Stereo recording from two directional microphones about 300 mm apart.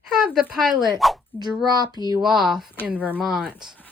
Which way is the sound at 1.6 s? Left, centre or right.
Centre.